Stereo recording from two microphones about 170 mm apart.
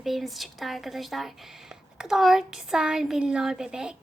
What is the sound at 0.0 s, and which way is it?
A woman's voice, centre (ahead or behind).